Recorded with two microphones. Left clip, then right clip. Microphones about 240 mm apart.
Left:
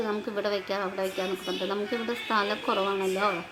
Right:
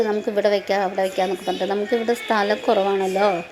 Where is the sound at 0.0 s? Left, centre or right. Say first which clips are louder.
Right 10 dB; centre.